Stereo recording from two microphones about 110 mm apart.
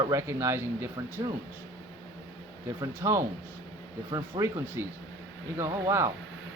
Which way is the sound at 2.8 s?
25° right (ahead or behind).